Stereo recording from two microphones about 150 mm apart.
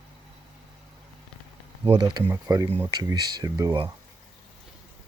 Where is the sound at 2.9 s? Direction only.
25° right (ahead or behind).